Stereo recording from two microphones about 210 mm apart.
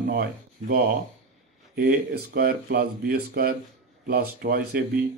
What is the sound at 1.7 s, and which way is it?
Speech, 45° right (ahead or behind).